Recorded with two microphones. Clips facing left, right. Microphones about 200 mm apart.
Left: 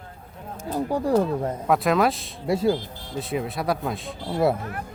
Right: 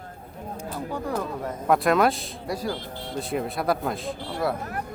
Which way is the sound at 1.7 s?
Centre (ahead or behind).